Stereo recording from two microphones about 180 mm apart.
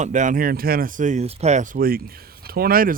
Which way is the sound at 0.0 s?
45° right (ahead or behind).